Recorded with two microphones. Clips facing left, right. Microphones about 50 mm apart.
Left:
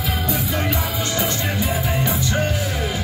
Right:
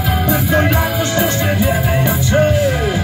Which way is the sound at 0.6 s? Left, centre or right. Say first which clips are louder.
Right 8 dB; right.